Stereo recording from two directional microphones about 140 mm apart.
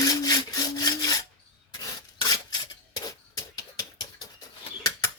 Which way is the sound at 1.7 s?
25° left (ahead or behind).